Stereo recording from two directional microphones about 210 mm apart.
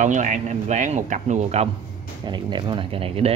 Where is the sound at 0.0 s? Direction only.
35° right (ahead or behind).